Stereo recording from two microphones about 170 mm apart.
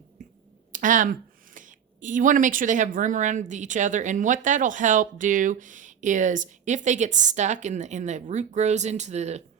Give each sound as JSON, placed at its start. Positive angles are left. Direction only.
{"t": 0.7, "sound": "speech", "side_deg": -50}